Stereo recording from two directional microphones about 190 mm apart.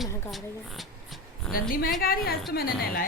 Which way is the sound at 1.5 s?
50° left (ahead or behind).